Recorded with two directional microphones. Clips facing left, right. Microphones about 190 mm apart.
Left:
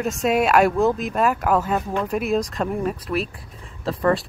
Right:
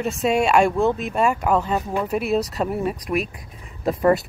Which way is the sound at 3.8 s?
20° right (ahead or behind).